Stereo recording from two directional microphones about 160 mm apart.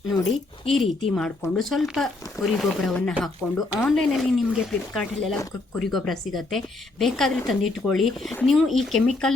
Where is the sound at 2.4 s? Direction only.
20° left (ahead or behind).